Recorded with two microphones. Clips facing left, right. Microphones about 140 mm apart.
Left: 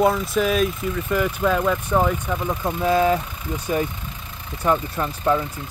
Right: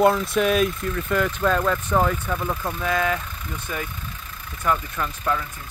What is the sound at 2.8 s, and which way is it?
Speech, 30° left (ahead or behind).